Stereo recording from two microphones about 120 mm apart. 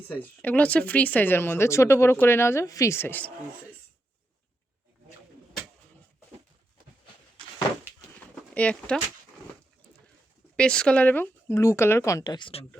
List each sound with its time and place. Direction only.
0.1 s speech: 15° left (ahead or behind)
8.2 s a sound: 10° left (ahead or behind)
10.6 s speech: 5° left (ahead or behind); by 12.6 s 45° left (ahead or behind)